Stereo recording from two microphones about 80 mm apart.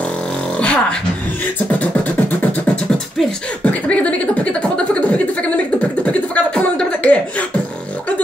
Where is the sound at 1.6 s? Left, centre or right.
Centre.